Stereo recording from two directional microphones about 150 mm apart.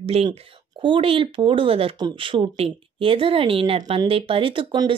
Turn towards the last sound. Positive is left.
turn(degrees=-35)  # may be behind; listen again after turning